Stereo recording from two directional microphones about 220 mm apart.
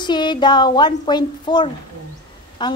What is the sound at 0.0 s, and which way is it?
A woman's voice, 20° left (ahead or behind).